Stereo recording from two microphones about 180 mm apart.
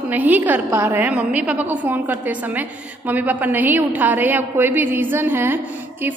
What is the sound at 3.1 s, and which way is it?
A woman's voice, 10° right (ahead or behind).